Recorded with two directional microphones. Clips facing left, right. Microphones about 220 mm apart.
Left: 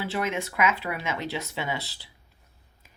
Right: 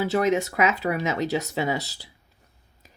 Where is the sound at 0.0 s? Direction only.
40° right (ahead or behind).